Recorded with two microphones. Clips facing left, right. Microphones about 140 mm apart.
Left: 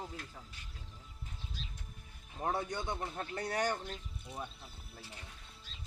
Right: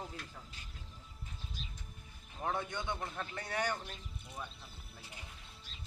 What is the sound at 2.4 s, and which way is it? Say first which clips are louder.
Speech: left 2 dB; 40° left (ahead or behind).